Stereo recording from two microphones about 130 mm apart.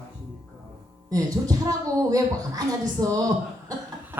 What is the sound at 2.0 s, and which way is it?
Speech, 30° right (ahead or behind).